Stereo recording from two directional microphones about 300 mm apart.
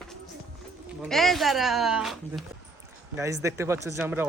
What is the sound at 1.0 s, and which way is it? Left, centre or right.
Speech, centre.